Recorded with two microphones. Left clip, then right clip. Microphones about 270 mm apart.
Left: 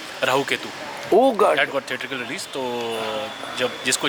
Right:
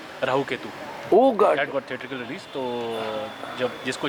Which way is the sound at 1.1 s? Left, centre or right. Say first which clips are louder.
Left 1 dB; right.